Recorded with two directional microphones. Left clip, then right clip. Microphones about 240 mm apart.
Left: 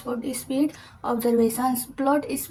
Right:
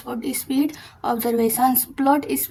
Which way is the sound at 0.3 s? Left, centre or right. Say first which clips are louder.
Right 4 dB; right.